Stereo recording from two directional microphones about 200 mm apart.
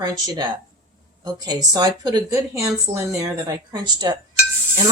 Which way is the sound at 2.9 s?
35° right (ahead or behind).